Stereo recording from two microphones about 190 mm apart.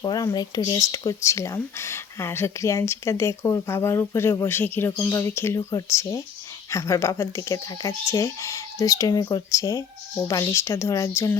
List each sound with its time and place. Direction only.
0.0 s speech: 20° left (ahead or behind)